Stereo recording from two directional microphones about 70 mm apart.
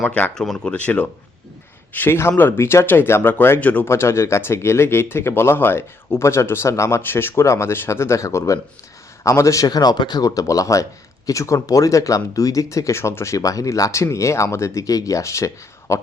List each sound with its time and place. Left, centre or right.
0.3 s speech: centre
0.7 s speech: centre
1.9 s speech: left
3.6 s speech: left
3.8 s speech: left
7.0 s speech: left
9.6 s speech: left